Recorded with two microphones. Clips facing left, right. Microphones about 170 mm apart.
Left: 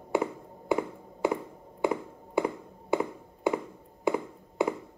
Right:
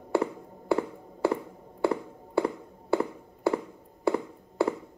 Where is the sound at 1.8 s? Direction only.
15° left (ahead or behind).